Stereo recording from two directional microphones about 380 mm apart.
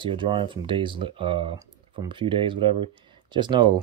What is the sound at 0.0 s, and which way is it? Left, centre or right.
Speech, centre.